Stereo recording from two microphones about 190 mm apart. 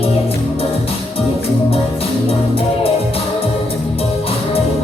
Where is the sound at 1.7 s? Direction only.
30° left (ahead or behind).